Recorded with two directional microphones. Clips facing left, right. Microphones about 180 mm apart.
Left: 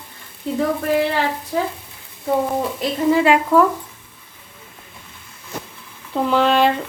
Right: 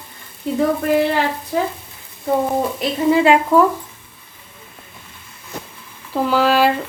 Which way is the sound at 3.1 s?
25° right (ahead or behind).